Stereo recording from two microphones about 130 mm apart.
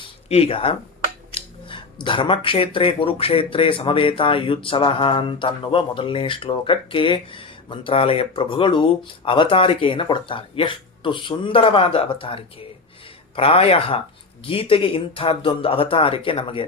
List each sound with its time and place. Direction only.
0.3 s speech: 50° left (ahead or behind)